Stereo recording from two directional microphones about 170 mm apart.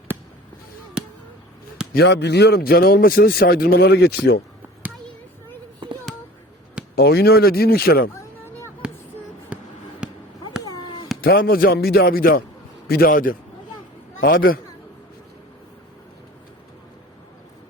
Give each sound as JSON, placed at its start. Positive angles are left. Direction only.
{"t": 1.0, "sound": "basketball bounce", "side_deg": -5}
{"t": 1.9, "sound": "speech", "side_deg": 75}
{"t": 6.9, "sound": "speech", "side_deg": 70}
{"t": 8.8, "sound": "a sound", "side_deg": -5}
{"t": 9.5, "sound": "basketball bounce", "side_deg": -5}
{"t": 10.8, "sound": "a sound", "side_deg": 30}
{"t": 11.2, "sound": "speech", "side_deg": 60}